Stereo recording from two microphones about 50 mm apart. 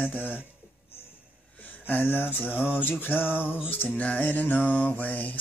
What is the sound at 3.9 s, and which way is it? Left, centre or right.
Mantra, left.